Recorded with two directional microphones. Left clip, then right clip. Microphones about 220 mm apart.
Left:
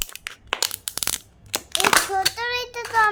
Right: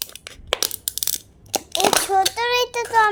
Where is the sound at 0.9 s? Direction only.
20° left (ahead or behind).